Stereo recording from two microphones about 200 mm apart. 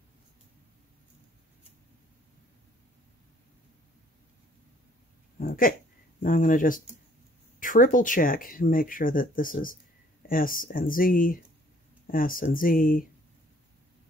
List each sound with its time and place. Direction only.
5.4 s speech: 45° left (ahead or behind)